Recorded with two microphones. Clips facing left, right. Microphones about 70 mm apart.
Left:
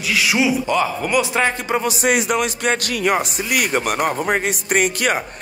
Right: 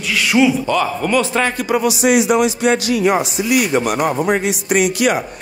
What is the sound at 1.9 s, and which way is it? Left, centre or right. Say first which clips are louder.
A man's voice: right 5 dB; left.